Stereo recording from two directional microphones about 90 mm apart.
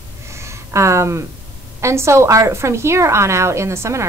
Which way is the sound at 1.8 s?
30° right (ahead or behind).